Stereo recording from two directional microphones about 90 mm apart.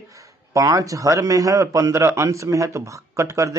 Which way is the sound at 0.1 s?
35° right (ahead or behind).